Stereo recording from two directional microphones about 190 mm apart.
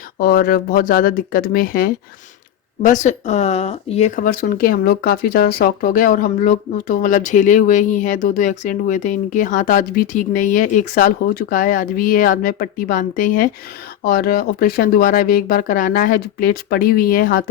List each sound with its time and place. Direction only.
0.2 s speech: 50° left (ahead or behind)